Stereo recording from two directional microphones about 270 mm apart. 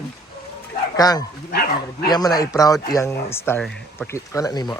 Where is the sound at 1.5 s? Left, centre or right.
Left.